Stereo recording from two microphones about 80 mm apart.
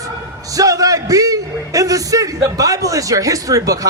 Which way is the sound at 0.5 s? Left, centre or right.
Right.